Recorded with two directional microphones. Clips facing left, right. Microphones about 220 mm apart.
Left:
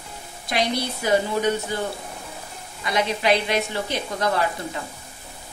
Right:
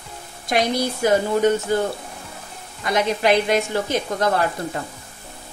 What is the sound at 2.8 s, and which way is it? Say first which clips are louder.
A woman's voice: right 3 dB; 45° right (ahead or behind).